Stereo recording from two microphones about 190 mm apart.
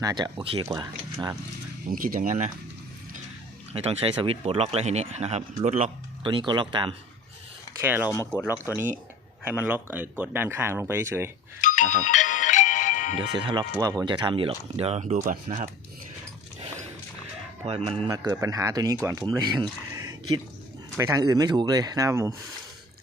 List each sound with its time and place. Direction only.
0.0 s speech: 20° right (ahead or behind)
1.9 s speech: 45° right (ahead or behind)
3.7 s speech: 35° right (ahead or behind)
7.8 s speech: 10° right (ahead or behind)
8.1 s speech: 10° left (ahead or behind)
8.4 s speech: 10° right (ahead or behind)
11.6 s music: 40° left (ahead or behind)
13.1 s speech: 25° right (ahead or behind); by 15.7 s 40° right (ahead or behind)
17.7 s speech: 30° right (ahead or behind)
18.3 s speech: 15° right (ahead or behind)